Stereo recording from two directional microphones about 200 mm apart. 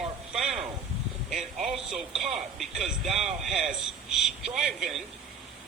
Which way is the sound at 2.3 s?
Centre (ahead or behind).